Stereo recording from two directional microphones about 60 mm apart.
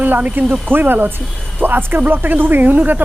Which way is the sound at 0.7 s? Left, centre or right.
Right.